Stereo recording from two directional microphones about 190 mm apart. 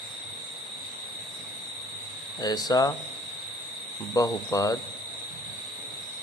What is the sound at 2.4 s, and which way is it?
Speech, 20° left (ahead or behind).